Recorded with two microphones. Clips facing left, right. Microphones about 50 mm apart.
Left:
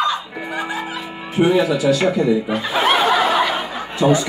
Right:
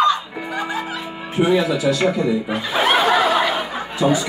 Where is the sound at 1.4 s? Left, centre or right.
Centre.